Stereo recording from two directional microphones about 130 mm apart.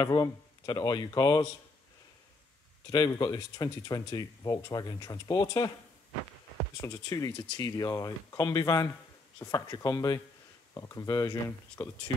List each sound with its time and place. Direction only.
0.0 s speech: 30° left (ahead or behind)
2.9 s speech: 30° left (ahead or behind)
6.8 s speech: 25° left (ahead or behind)
11.8 s speech: 10° left (ahead or behind)